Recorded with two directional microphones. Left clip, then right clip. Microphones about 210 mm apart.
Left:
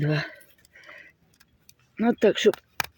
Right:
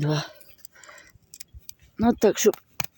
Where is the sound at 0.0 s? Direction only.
10° right (ahead or behind).